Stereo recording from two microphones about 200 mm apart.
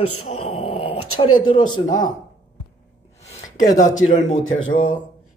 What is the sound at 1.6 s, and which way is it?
Speech, 40° left (ahead or behind).